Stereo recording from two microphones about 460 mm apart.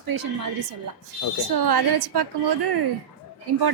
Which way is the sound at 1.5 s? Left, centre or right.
Right.